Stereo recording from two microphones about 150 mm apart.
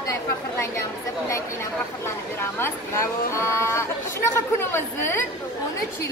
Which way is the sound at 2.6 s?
20° left (ahead or behind).